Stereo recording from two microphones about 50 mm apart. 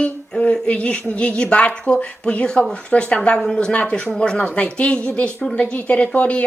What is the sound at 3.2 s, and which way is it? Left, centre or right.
Speech, centre.